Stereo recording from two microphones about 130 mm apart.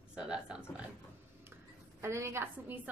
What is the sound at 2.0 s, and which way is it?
Speech, 20° right (ahead or behind).